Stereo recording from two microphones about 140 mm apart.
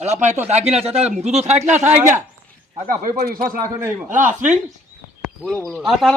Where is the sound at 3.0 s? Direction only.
85° right.